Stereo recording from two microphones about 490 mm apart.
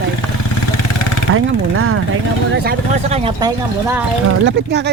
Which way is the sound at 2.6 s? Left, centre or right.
Centre.